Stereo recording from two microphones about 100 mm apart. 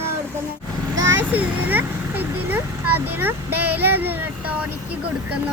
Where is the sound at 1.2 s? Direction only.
15° right (ahead or behind).